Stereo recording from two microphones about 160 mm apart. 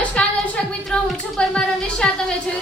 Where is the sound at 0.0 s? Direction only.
5° left (ahead or behind).